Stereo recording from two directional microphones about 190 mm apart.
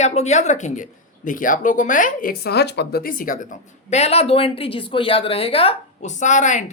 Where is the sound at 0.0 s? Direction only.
35° left (ahead or behind).